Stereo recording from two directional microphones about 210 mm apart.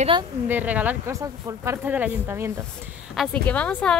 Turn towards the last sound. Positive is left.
turn(degrees=5)  # may be behind; listen again after turning